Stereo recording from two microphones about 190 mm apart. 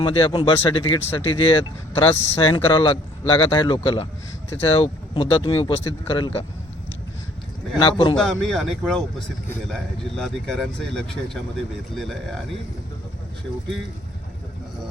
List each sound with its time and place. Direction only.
0.0 s speech: 25° left (ahead or behind)
7.8 s speech: 25° left (ahead or behind)
8.2 s speech: centre (ahead or behind)